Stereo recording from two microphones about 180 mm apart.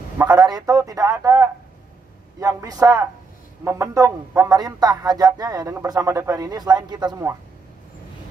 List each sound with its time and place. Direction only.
0.3 s speech: 20° right (ahead or behind)